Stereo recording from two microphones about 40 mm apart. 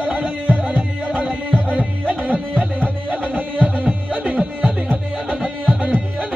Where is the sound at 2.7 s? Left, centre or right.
Right.